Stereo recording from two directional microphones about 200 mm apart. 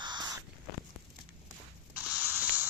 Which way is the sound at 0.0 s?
20° right (ahead or behind).